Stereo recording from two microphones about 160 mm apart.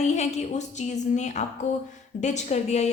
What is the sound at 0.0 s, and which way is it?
A woman's voice, 45° left (ahead or behind).